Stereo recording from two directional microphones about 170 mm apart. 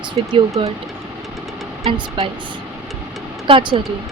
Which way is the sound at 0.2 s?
35° right (ahead or behind).